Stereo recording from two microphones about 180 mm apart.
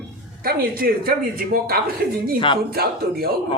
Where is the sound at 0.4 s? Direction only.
55° right (ahead or behind).